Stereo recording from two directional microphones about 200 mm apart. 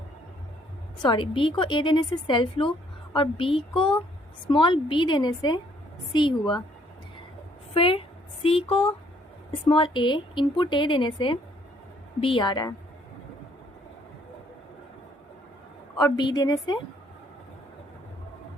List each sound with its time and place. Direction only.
1.0 s a woman's voice: 25° left (ahead or behind)
7.7 s a woman's voice: 30° left (ahead or behind)
16.0 s a woman's voice: 20° left (ahead or behind)